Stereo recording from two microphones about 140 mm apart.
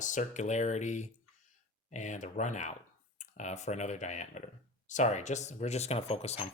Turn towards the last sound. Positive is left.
turn(degrees=45)  # may be behind; listen again after turning